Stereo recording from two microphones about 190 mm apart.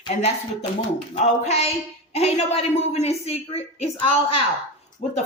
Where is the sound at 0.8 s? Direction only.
30° left (ahead or behind).